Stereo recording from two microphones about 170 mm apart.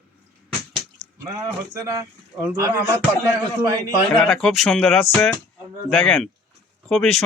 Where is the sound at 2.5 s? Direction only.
15° right (ahead or behind).